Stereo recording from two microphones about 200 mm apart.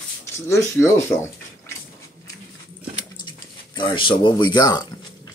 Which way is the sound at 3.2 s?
25° left (ahead or behind).